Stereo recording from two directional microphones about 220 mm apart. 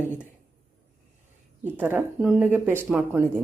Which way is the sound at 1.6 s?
10° right (ahead or behind).